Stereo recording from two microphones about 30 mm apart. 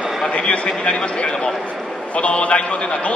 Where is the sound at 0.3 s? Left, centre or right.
Left.